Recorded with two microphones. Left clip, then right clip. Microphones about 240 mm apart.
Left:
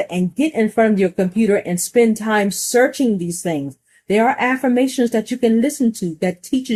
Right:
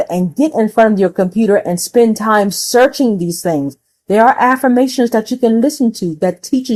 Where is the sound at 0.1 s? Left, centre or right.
Right.